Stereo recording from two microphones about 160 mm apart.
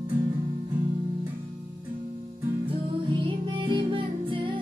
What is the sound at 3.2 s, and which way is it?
Music, 30° right (ahead or behind).